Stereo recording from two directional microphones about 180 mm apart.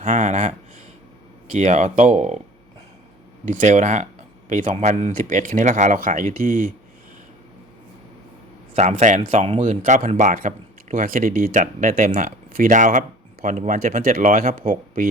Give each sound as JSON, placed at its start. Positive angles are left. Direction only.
{"t": 0.0, "sound": "a sound", "side_deg": -45}
{"t": 1.5, "sound": "speech", "side_deg": -45}
{"t": 3.4, "sound": "speech", "side_deg": -45}
{"t": 8.7, "sound": "speech", "side_deg": -40}